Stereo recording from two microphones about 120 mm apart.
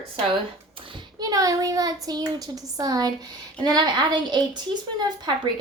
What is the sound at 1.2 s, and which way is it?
A woman's voice, 30° right (ahead or behind).